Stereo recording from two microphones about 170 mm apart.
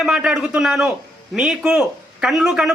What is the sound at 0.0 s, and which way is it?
A man's voice, 5° right (ahead or behind).